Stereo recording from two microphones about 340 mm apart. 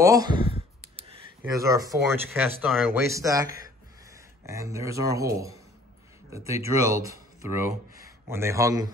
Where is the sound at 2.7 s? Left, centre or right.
Centre.